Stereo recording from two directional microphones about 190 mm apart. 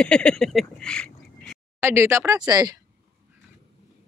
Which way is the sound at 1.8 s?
15° right (ahead or behind).